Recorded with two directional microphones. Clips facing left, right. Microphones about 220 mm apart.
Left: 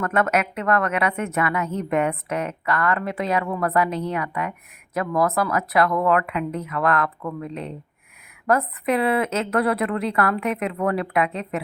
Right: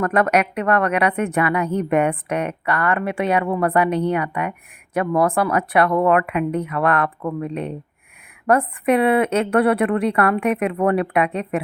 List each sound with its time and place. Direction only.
0.0 s a woman's voice: 35° right (ahead or behind)
7.4 s speech: 65° right (ahead or behind)
8.4 s a woman's voice: 30° right (ahead or behind)